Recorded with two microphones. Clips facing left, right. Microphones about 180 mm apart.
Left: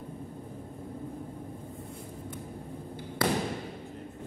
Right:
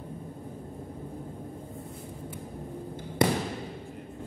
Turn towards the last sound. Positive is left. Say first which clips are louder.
# right 3 dB
turn(degrees=-20)  # may be behind; listen again after turning